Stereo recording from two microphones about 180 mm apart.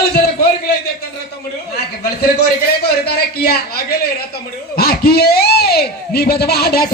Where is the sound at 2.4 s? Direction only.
60° left (ahead or behind).